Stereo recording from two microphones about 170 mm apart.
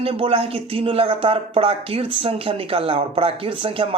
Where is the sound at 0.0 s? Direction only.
35° right (ahead or behind).